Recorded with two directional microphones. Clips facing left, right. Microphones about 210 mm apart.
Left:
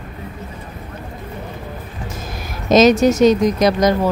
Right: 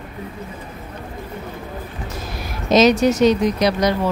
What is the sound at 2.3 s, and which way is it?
A woman's voice, 45° left (ahead or behind).